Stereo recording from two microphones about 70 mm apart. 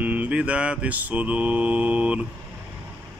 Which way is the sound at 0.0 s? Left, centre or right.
Right.